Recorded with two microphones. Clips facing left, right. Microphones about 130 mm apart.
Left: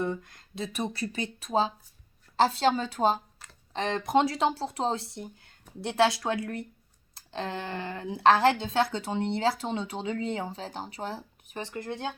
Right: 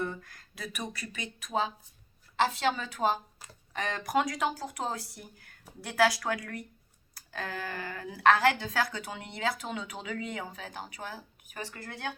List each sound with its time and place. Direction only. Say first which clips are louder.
0.0 s speech: left 4 dB; 20° left (ahead or behind)